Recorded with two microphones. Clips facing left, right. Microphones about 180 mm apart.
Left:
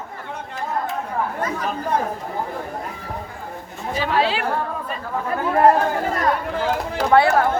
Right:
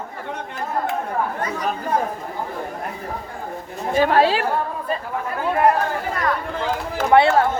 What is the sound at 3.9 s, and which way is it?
Speech, 50° right (ahead or behind).